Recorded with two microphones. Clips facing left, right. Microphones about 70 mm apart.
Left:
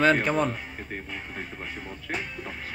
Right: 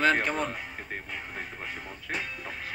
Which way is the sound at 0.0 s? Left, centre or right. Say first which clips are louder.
Left 4 dB; centre.